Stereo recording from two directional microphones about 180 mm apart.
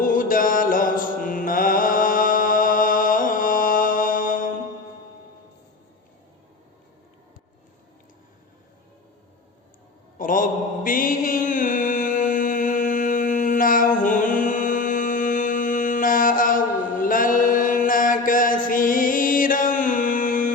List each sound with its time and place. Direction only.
0.0 s mantra: 50° left (ahead or behind)
10.2 s mantra: 50° left (ahead or behind)